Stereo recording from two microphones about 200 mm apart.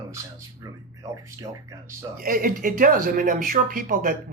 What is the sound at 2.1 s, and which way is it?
Speech, 45° right (ahead or behind).